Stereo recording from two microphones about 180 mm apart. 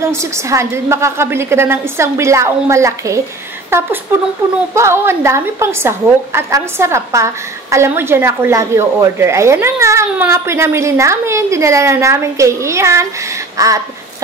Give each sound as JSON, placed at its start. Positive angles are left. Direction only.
{"t": 0.0, "sound": "speech", "side_deg": -15}